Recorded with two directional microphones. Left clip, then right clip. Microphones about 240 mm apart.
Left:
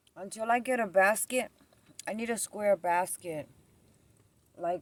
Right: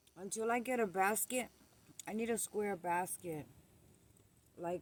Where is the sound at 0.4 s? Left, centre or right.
Left.